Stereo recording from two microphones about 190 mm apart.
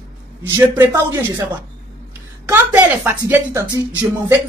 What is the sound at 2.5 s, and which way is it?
A woman's voice, 10° right (ahead or behind).